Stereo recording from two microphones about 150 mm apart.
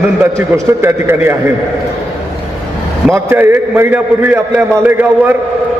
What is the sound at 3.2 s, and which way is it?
A man's voice, 15° right (ahead or behind).